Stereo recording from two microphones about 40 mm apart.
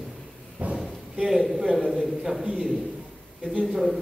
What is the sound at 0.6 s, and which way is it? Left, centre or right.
Speech, right.